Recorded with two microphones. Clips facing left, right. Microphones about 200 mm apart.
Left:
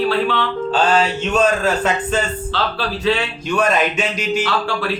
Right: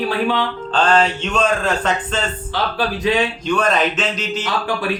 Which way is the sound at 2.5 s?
15° right (ahead or behind).